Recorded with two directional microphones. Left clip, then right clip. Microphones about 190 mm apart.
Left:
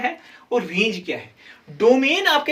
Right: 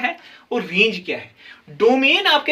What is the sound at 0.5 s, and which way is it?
Speech, 50° right (ahead or behind).